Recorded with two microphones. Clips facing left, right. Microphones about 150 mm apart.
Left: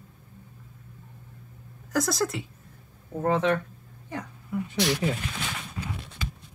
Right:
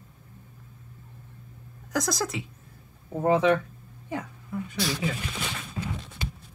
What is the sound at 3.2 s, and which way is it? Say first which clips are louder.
Speech: right 3 dB; 10° right (ahead or behind).